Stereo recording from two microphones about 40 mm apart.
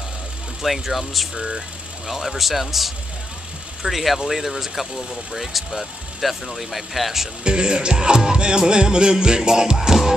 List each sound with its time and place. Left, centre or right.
0.6 s speech: centre
7.4 s music: right